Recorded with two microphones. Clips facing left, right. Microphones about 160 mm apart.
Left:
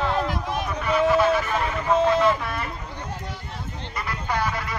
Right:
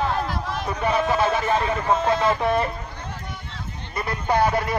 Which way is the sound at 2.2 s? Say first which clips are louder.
Right 3 dB; 25° right (ahead or behind).